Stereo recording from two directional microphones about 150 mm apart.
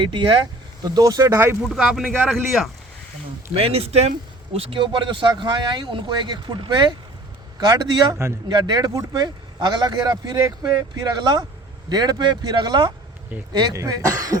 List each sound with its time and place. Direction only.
0.0 s speech: 35° right (ahead or behind); by 1.5 s 15° right (ahead or behind)
1.7 s speech: 5° right (ahead or behind)
3.6 s speech: 40° right (ahead or behind); by 14.3 s 25° right (ahead or behind)